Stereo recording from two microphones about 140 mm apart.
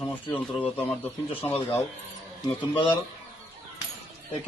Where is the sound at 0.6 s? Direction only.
45° left (ahead or behind).